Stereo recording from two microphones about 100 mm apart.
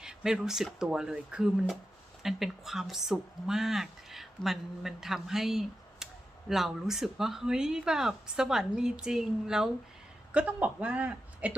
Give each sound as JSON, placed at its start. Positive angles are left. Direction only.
{"t": 0.0, "sound": "speech", "side_deg": -5}